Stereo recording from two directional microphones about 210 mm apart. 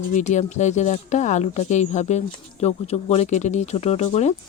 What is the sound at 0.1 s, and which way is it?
Speech, 35° left (ahead or behind).